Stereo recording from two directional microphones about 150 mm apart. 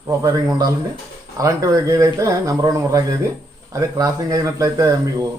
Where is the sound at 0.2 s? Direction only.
25° right (ahead or behind).